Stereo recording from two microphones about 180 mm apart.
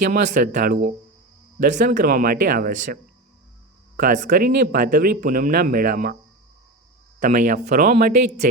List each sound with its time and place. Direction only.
0.0 s speech: 45° right (ahead or behind)
7.2 s speech: 50° right (ahead or behind)